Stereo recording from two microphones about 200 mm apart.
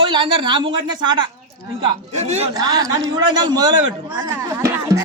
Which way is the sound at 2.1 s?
35° right (ahead or behind).